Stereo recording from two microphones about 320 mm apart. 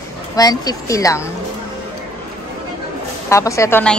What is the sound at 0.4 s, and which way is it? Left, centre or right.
Speech, centre.